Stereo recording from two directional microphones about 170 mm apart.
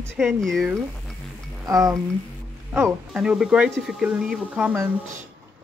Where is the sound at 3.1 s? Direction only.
5° right (ahead or behind).